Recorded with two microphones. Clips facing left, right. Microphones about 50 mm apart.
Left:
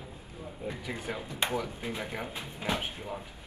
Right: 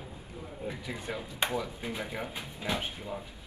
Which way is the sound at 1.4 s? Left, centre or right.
Left.